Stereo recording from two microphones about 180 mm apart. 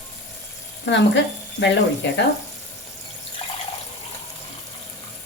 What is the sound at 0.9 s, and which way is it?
Speech, 80° left.